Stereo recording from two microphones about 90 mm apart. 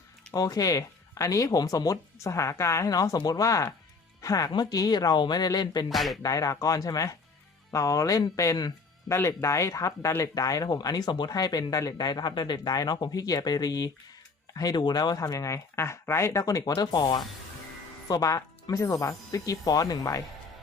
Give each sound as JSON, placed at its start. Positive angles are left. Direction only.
{"t": 0.3, "sound": "speech", "side_deg": 45}
{"t": 5.9, "sound": "speech", "side_deg": 0}
{"t": 6.2, "sound": "speech", "side_deg": 40}
{"t": 9.0, "sound": "speech", "side_deg": 30}
{"t": 18.1, "sound": "speech", "side_deg": 40}